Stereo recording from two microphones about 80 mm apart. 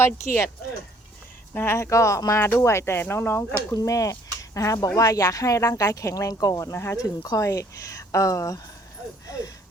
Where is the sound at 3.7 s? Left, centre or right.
Left.